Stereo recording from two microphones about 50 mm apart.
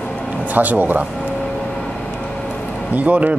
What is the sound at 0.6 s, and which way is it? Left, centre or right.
Speech, right.